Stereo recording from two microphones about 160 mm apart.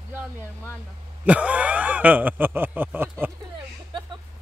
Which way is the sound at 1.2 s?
10° right (ahead or behind).